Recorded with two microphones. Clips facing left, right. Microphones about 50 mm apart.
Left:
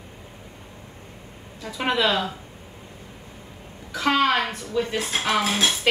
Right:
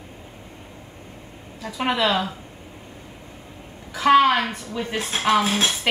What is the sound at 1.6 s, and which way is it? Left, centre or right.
Speech, centre.